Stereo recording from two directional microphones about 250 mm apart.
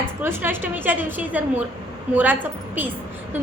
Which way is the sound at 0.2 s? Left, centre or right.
Centre.